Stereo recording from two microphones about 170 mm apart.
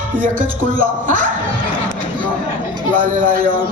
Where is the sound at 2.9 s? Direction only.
50° right (ahead or behind).